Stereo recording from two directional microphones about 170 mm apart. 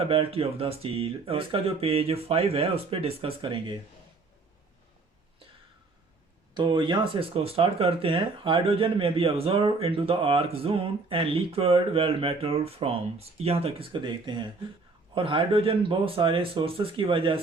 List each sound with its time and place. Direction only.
0.0 s speech: 35° right (ahead or behind)
6.5 s speech: 25° right (ahead or behind)